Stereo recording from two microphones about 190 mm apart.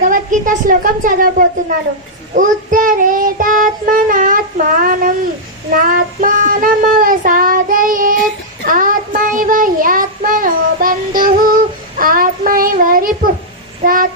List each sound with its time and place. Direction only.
0.1 s a woman's voice: 45° right (ahead or behind)
2.3 s child singing: 45° right (ahead or behind)